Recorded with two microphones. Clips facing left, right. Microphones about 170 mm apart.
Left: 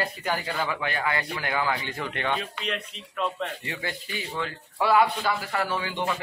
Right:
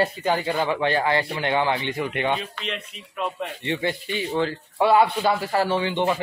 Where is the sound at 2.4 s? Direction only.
Centre (ahead or behind).